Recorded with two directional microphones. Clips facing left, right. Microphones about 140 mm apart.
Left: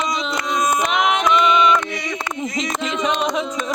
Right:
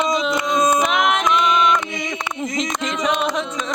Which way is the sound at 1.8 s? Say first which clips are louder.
Even; 25° right (ahead or behind).